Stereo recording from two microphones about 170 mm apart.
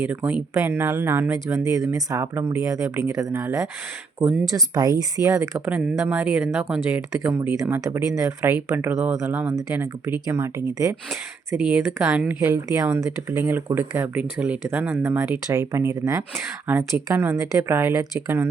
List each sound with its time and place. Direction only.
0.1 s speech: 5° right (ahead or behind)
11.6 s speech: 5° right (ahead or behind)